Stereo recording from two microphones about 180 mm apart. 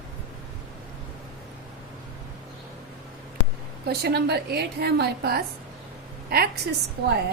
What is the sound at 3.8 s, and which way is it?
A woman's voice, 65° right (ahead or behind).